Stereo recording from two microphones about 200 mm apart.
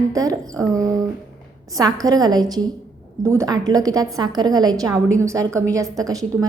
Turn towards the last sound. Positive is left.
turn(degrees=-15)  # may be behind; listen again after turning